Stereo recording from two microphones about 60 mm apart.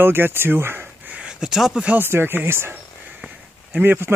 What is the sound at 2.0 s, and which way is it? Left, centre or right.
Speech, right.